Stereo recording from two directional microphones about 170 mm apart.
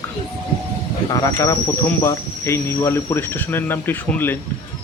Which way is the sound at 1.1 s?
20° left (ahead or behind).